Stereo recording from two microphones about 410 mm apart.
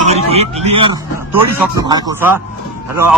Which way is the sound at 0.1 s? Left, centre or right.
Centre.